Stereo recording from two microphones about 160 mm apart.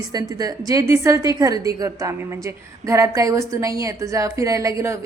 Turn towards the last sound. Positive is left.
turn(degrees=-20)  # may be behind; listen again after turning